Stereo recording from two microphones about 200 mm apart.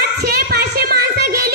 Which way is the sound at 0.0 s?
50° right (ahead or behind).